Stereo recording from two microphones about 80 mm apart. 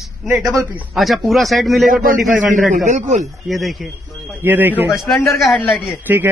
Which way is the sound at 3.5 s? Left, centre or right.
Centre.